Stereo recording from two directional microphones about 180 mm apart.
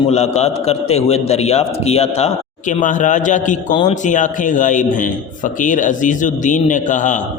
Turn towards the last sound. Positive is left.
turn(degrees=45)  # may be behind; listen again after turning